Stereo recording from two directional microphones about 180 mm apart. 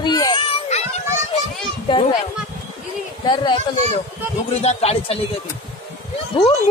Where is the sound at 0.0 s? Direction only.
20° left (ahead or behind).